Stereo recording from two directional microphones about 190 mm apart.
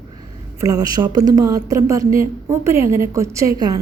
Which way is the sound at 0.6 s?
20° right (ahead or behind).